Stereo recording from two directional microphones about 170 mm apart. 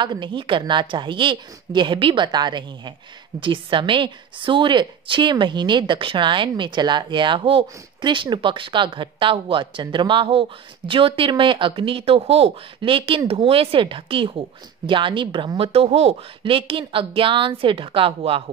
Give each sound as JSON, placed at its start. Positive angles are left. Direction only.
{"t": 0.0, "sound": "a woman's voice", "side_deg": -25}